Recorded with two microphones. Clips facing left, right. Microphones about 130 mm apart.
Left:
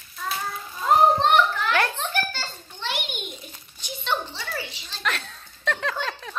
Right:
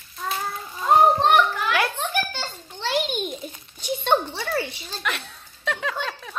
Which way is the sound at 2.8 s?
35° right (ahead or behind).